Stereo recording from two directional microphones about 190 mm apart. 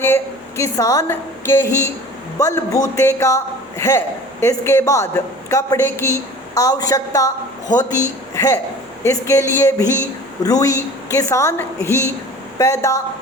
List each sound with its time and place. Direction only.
0.0 s a woman's voice: 15° left (ahead or behind)